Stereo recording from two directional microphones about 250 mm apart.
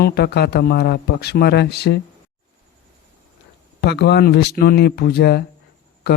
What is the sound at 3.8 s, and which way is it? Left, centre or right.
Speech, left.